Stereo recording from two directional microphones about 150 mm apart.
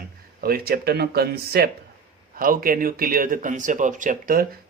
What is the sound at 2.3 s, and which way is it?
Speech, 70° right (ahead or behind).